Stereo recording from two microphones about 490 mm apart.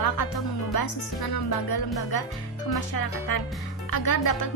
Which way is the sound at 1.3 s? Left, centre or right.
Left.